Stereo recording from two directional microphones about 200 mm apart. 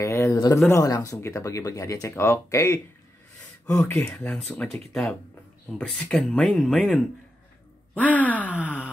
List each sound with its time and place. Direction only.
0.0 s speech: 15° left (ahead or behind)
8.2 s speech: 10° left (ahead or behind)
8.5 s a sound: 5° right (ahead or behind)